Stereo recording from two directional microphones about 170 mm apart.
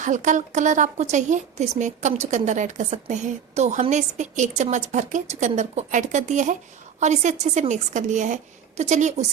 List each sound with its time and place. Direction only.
0.0 s speech: 45° right (ahead or behind)